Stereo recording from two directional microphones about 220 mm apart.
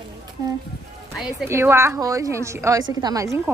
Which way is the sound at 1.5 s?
10° right (ahead or behind).